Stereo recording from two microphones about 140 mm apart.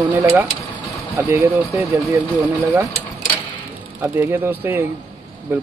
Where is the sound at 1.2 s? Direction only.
15° right (ahead or behind).